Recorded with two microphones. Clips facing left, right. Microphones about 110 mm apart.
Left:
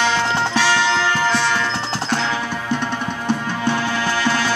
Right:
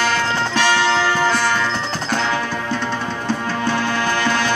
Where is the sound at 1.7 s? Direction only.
25° left (ahead or behind).